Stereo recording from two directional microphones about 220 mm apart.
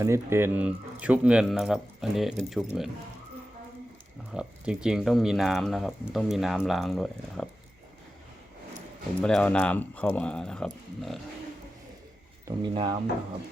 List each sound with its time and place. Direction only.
0.0 s speech: 10° right (ahead or behind)
4.3 s speech: 5° right (ahead or behind)
9.2 s speech: 5° left (ahead or behind)
12.5 s speech: 20° right (ahead or behind)